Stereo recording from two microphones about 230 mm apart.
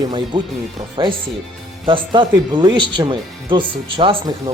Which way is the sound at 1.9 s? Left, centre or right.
Right.